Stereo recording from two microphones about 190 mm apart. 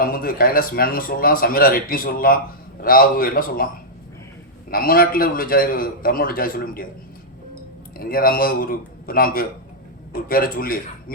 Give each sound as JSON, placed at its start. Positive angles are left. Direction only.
{"t": 0.0, "sound": "speech", "side_deg": 50}
{"t": 4.7, "sound": "speech", "side_deg": 50}
{"t": 7.9, "sound": "speech", "side_deg": 50}